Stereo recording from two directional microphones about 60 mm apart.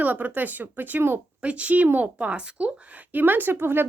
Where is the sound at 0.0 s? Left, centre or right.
Right.